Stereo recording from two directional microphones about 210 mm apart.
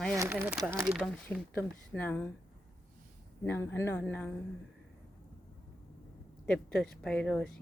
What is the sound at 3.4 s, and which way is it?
Speech, 10° left (ahead or behind).